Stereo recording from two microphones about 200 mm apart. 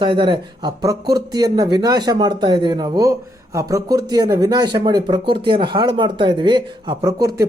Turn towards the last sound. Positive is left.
turn(degrees=-20)  # may be behind; listen again after turning